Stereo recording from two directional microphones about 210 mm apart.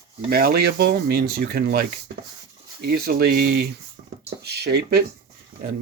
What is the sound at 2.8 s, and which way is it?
Speech, 45° right (ahead or behind).